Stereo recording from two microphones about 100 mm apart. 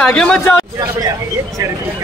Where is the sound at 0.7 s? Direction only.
35° right (ahead or behind).